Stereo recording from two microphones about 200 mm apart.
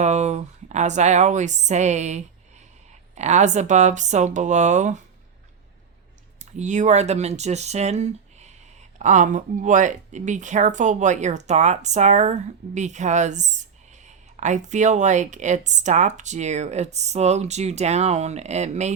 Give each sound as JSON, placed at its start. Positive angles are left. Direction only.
{"t": 0.0, "sound": "speech", "side_deg": -35}
{"t": 6.4, "sound": "speech", "side_deg": -35}